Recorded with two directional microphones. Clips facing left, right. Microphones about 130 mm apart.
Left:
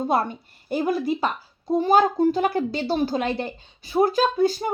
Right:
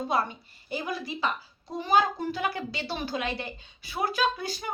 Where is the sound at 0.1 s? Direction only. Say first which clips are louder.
Left 5 dB; 50° left (ahead or behind).